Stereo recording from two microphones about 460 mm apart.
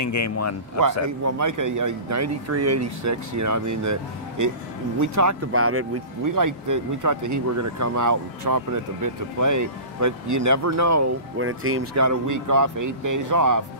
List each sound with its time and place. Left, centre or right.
0.0 s a man's voice: left
1.0 s speech: right
6.2 s speech: right